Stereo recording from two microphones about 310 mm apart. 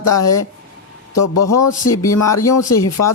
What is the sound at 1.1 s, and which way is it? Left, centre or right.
Speech, left.